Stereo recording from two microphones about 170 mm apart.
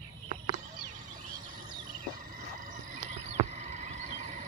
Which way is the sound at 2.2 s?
50° right (ahead or behind).